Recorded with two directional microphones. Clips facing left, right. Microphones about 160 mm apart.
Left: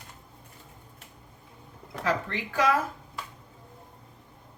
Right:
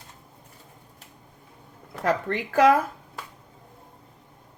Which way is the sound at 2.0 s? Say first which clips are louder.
Right 4 dB; 55° right (ahead or behind).